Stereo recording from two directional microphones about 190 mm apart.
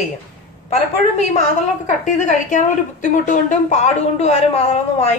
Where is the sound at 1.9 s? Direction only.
40° left (ahead or behind).